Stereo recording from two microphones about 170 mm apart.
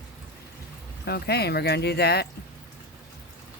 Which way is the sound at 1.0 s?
70° left (ahead or behind).